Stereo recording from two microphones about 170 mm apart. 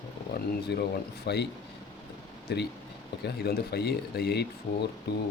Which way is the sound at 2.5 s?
75° left (ahead or behind).